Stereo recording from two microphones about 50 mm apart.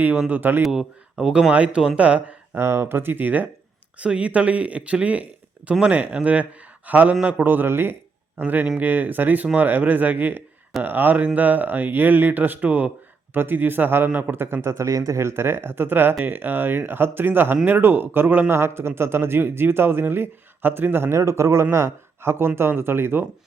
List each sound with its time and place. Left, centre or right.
0.3 s speech: right
0.7 s speech: centre; by 2.3 s right
2.6 s speech: right
2.8 s speech: right
4.0 s a man's voice: right
7.4 s speech: right
8.4 s speech: right
13.3 s speech: right
14.1 s speech: right
14.3 s speech: right
18.5 s speech: right
21.2 s speech: right